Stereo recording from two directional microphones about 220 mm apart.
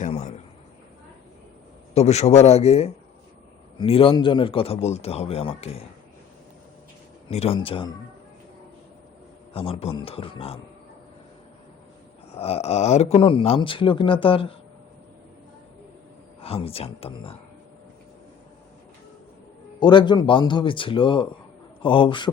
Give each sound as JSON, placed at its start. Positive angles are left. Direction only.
{"t": 0.0, "sound": "a sound", "side_deg": 30}
{"t": 1.9, "sound": "speech", "side_deg": 30}
{"t": 7.3, "sound": "speech", "side_deg": 30}
{"t": 9.5, "sound": "speech", "side_deg": 25}
{"t": 12.3, "sound": "speech", "side_deg": 25}
{"t": 16.4, "sound": "speech", "side_deg": 25}
{"t": 19.8, "sound": "speech", "side_deg": 20}